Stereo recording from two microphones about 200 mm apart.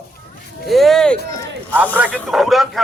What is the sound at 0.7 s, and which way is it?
A man's voice, centre (ahead or behind).